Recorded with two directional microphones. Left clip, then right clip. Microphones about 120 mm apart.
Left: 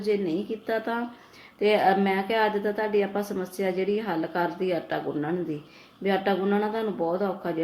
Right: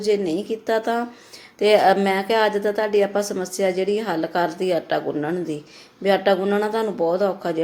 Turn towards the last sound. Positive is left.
turn(degrees=-25)  # may be behind; listen again after turning